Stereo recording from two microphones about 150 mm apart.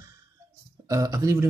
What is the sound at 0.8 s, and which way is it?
Speech, 25° right (ahead or behind).